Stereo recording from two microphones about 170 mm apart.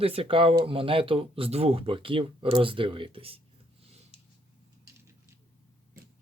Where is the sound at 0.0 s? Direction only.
35° right (ahead or behind).